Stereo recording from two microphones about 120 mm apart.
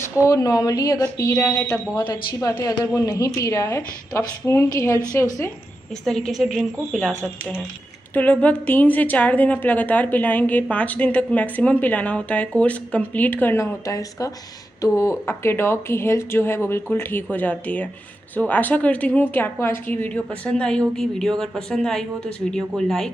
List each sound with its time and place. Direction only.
0.2 s a woman's voice: 30° left (ahead or behind)
1.4 s a woman's voice: 10° left (ahead or behind)
2.0 s a woman's voice: 35° left (ahead or behind)
6.0 s a woman's voice: 5° left (ahead or behind)